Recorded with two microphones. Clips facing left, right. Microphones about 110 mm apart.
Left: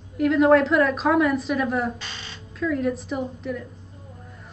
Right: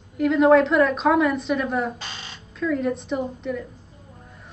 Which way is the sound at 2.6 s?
Centre (ahead or behind).